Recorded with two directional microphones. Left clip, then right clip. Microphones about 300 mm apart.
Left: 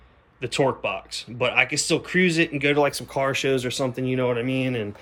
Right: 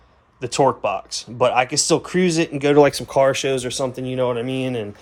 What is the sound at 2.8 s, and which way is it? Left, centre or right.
Speech, right.